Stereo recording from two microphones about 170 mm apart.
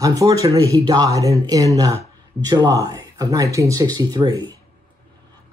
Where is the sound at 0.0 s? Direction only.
20° right (ahead or behind).